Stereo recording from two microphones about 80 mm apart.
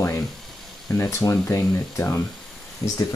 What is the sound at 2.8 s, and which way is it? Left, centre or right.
Speech, left.